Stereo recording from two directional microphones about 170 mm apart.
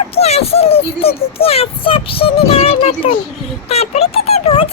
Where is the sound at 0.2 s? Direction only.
35° left (ahead or behind).